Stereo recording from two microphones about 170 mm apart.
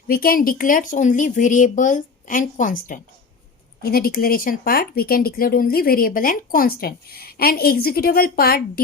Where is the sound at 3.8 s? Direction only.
60° left (ahead or behind).